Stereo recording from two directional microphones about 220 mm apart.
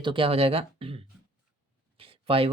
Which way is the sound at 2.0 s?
25° right (ahead or behind).